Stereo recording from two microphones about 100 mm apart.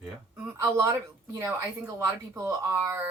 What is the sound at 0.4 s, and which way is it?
A woman's voice, 30° right (ahead or behind).